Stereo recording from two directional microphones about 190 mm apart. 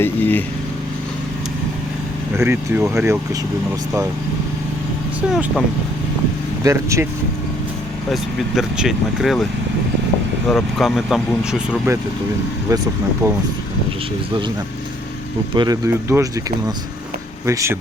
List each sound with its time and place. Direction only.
0.0 s speech: 10° left (ahead or behind)
2.3 s speech: 10° right (ahead or behind)
5.3 s speech: centre (ahead or behind)
6.6 s speech: 15° right (ahead or behind)
8.1 s speech: centre (ahead or behind)
10.5 s speech: centre (ahead or behind)
13.2 s speech: 15° right (ahead or behind)
15.5 s speech: 20° right (ahead or behind)
17.4 s speech: 15° right (ahead or behind)